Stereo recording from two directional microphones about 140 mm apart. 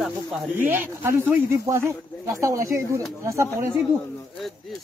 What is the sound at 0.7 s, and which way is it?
Speech, 15° right (ahead or behind).